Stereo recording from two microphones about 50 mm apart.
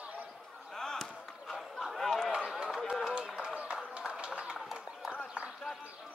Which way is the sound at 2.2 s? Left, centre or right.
Centre.